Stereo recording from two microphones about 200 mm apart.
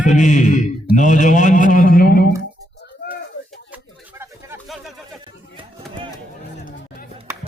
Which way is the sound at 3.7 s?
10° right (ahead or behind).